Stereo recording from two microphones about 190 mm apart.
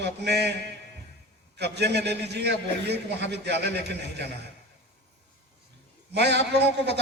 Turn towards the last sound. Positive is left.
turn(degrees=-65)  # may be behind; listen again after turning